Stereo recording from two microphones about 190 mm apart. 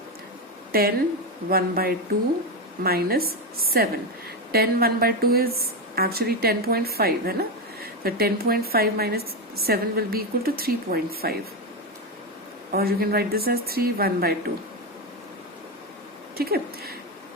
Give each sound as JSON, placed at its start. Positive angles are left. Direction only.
{"t": 0.7, "sound": "a woman's voice", "side_deg": -50}
{"t": 12.7, "sound": "a woman's voice", "side_deg": -55}
{"t": 16.4, "sound": "speech", "side_deg": -55}